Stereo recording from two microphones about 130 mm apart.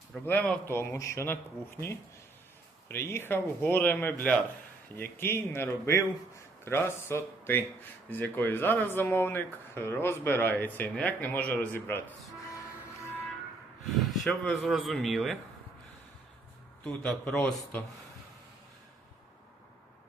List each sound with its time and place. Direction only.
0.3 s speech: 15° left (ahead or behind)
2.9 s speech: 20° left (ahead or behind)
14.0 s a sound: centre (ahead or behind)
14.4 s a man's voice: centre (ahead or behind)
16.8 s speech: 5° left (ahead or behind)